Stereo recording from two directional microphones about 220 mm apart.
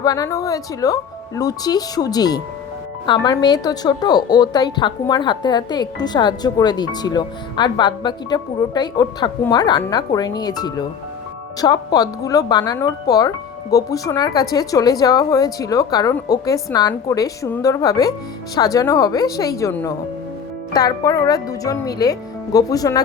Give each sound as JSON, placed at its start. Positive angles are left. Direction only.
{"t": 0.0, "sound": "a woman's voice", "side_deg": 15}